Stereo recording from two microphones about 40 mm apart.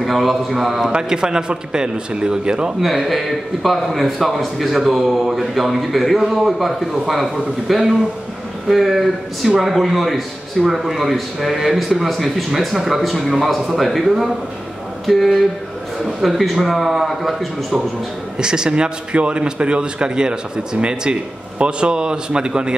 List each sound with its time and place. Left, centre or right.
0.0 s a man's voice: centre
0.9 s a man's voice: centre
2.8 s a man's voice: centre
18.4 s a man's voice: centre